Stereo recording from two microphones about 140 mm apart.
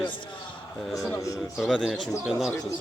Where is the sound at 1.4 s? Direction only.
Centre (ahead or behind).